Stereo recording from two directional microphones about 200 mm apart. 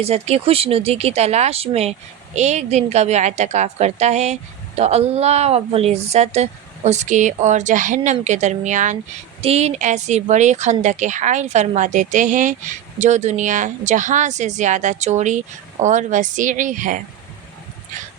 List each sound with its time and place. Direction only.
0.0 s speech: 30° right (ahead or behind)